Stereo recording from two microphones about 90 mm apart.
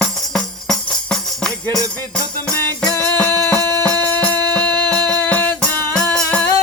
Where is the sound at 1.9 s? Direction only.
15° left (ahead or behind).